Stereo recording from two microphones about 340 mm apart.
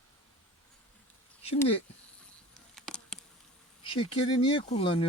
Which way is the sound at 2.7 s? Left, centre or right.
Centre.